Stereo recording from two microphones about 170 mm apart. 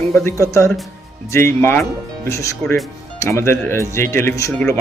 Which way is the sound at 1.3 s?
15° left (ahead or behind).